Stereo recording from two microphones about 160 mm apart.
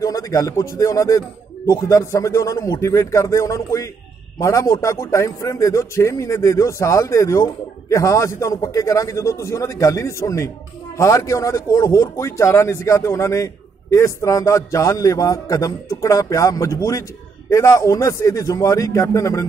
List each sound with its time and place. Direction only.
0.0 s speech: 20° left (ahead or behind)